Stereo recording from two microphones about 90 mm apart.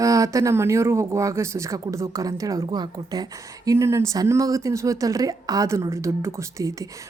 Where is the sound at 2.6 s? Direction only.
55° right (ahead or behind).